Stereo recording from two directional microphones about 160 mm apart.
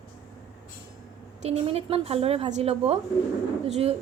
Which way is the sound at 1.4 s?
40° right (ahead or behind).